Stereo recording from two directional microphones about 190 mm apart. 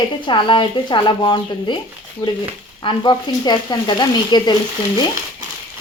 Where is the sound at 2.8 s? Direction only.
25° left (ahead or behind).